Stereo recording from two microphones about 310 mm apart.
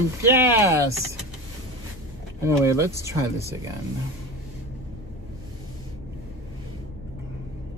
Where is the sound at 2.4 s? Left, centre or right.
Centre.